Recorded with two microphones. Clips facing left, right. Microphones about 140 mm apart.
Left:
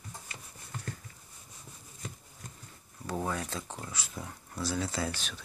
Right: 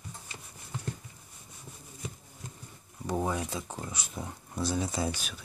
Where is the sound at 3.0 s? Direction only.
15° right (ahead or behind).